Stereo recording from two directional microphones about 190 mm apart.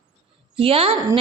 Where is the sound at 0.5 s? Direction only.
30° right (ahead or behind).